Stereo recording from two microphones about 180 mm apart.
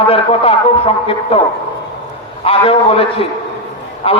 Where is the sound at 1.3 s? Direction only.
35° left (ahead or behind).